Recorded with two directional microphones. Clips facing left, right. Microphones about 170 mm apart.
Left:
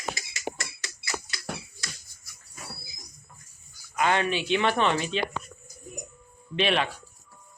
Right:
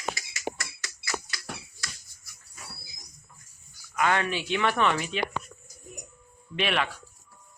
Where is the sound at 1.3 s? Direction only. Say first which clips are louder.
Even; 25° left (ahead or behind).